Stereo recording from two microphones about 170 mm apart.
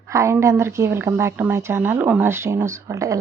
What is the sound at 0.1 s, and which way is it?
A woman's voice, 15° right (ahead or behind).